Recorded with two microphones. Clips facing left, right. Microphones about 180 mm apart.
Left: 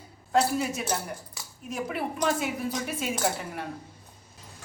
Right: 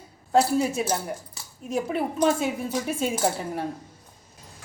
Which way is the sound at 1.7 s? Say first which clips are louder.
Right 5 dB; 25° right (ahead or behind).